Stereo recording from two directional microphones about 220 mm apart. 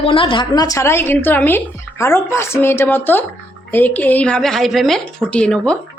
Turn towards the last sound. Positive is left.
turn(degrees=5)  # may be behind; listen again after turning